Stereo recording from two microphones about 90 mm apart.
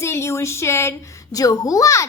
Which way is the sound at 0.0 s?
30° left (ahead or behind).